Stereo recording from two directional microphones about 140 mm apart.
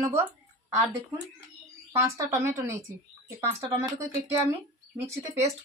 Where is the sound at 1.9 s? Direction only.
20° right (ahead or behind).